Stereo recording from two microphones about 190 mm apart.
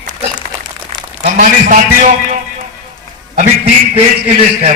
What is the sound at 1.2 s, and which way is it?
Speech, 45° right (ahead or behind).